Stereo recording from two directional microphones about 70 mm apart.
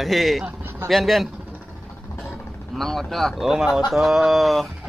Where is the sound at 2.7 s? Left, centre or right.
Centre.